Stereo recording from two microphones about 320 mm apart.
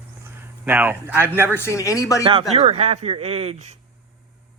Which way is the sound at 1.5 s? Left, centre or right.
Centre.